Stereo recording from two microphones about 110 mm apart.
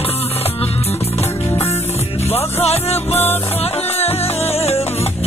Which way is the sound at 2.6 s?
70° left (ahead or behind).